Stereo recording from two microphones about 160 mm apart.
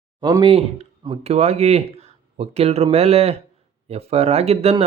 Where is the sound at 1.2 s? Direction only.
45° right (ahead or behind).